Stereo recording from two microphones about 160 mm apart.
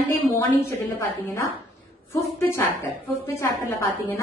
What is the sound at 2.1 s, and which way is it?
A woman's voice, 15° left (ahead or behind).